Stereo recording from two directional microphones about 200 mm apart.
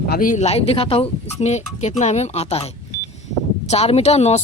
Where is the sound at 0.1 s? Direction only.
40° left (ahead or behind).